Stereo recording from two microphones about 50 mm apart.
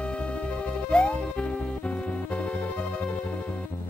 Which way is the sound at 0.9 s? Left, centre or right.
Centre.